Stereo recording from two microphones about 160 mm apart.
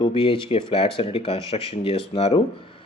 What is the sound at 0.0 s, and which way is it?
Speech, 35° left (ahead or behind).